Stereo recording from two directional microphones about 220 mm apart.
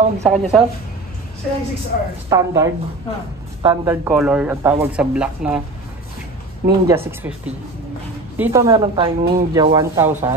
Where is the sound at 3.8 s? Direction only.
10° right (ahead or behind).